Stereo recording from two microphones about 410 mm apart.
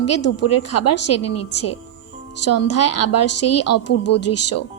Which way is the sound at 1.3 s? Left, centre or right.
Left.